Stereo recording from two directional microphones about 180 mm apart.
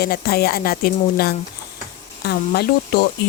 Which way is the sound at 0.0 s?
60° left (ahead or behind).